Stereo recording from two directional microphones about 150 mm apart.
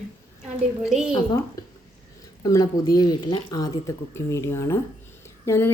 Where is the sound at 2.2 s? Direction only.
20° left (ahead or behind).